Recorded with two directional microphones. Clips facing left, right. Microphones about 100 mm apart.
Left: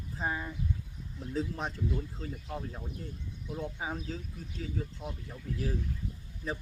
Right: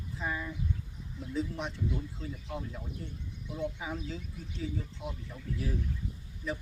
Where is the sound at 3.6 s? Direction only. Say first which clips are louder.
Right 1 dB; 40° left (ahead or behind).